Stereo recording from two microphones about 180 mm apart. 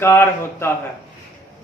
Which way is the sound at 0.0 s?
15° left (ahead or behind).